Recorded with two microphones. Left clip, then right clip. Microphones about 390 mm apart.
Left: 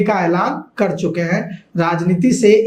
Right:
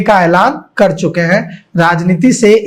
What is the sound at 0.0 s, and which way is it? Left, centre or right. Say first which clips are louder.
Speech: right 8 dB; right.